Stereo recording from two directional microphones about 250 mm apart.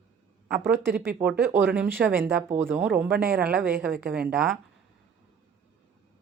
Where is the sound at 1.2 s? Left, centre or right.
Centre.